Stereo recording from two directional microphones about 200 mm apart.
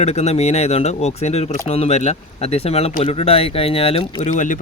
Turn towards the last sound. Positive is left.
turn(degrees=35)  # may be behind; listen again after turning